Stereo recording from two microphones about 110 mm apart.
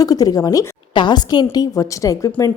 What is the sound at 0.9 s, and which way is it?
A woman's voice, 40° left (ahead or behind).